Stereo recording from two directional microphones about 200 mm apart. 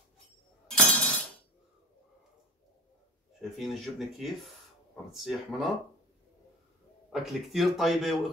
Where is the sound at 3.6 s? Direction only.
Centre (ahead or behind).